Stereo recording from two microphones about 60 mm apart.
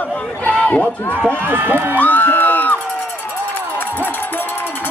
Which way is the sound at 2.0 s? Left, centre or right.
Left.